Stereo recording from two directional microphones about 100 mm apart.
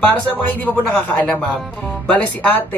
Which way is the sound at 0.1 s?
15° left (ahead or behind).